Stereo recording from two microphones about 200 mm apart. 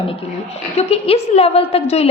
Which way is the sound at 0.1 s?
30° left (ahead or behind).